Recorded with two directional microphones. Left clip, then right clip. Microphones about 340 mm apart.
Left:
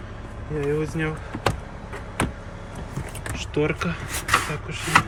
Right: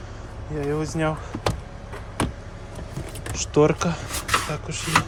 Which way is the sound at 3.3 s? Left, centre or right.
Centre.